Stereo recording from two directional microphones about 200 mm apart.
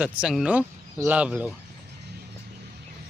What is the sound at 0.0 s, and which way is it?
Speech, 5° right (ahead or behind).